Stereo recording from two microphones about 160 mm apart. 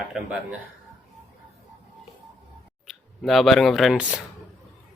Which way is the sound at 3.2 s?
Centre (ahead or behind).